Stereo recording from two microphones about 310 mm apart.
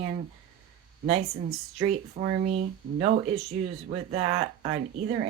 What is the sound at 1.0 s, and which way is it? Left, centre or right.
Speech, right.